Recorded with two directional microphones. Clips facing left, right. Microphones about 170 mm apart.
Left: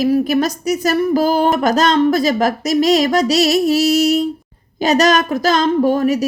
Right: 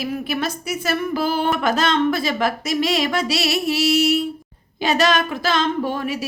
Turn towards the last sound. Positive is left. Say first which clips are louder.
# left 9 dB
turn(degrees=40)  # may be behind; listen again after turning